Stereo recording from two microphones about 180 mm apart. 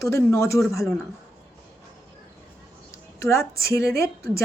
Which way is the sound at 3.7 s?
15° left (ahead or behind).